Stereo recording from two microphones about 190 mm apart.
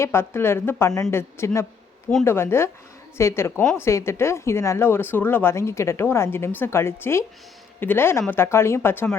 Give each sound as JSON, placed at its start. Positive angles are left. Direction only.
{"t": 0.0, "sound": "a woman's voice", "side_deg": 10}